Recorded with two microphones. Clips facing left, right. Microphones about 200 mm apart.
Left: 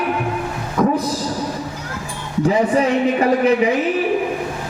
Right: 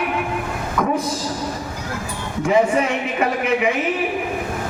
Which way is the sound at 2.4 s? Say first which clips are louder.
Left 1 dB; 35° left (ahead or behind).